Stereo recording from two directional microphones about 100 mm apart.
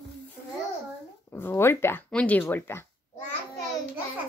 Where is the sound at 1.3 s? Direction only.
20° left (ahead or behind).